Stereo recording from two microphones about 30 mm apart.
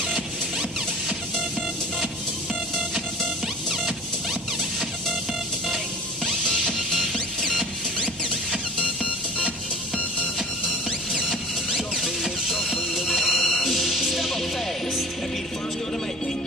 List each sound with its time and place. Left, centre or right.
0.1 s music: centre
6.6 s music: centre
8.0 s music: left
10.9 s music: centre